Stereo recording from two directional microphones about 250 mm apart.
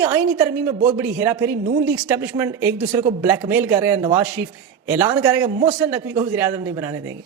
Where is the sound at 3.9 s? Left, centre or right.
Right.